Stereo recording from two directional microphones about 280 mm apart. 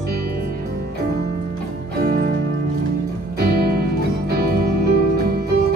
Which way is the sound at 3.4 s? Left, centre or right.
Right.